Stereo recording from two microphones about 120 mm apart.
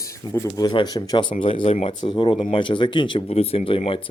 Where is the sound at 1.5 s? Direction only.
65° left (ahead or behind).